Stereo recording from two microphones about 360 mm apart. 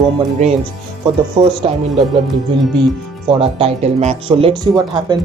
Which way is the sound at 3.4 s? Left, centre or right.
Centre.